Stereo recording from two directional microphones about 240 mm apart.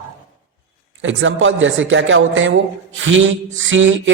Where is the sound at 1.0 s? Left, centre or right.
Right.